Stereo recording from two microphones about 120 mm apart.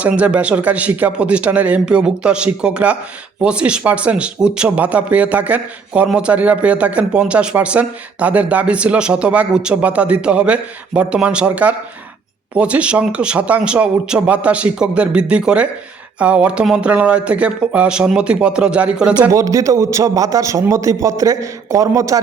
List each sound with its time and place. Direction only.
0.0 s speech: 10° right (ahead or behind)
19.3 s a man's voice: 30° right (ahead or behind)